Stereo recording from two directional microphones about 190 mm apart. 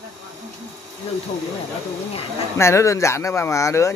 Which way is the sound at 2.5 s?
15° left (ahead or behind).